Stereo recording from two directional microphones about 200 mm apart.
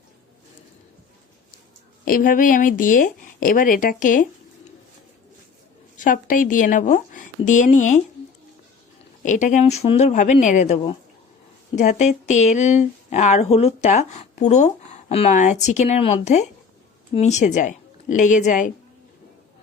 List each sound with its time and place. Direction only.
2.0 s speech: 45° left (ahead or behind)
6.0 s speech: 45° left (ahead or behind)
9.2 s speech: 40° left (ahead or behind)